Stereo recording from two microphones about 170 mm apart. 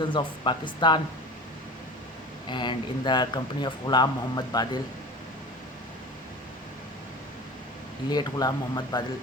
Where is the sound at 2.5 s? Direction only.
25° left (ahead or behind).